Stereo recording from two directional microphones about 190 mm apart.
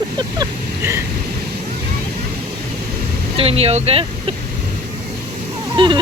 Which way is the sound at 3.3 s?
30° right (ahead or behind).